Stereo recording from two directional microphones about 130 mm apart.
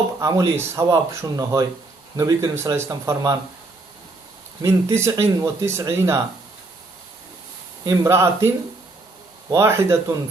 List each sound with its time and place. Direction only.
0.2 s speech: 25° right (ahead or behind)
4.6 s speech: 20° right (ahead or behind)
7.9 s speech: 25° right (ahead or behind)
9.5 s speech: 20° right (ahead or behind)